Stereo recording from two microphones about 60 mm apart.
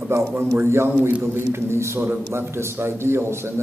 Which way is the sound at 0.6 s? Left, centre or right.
Right.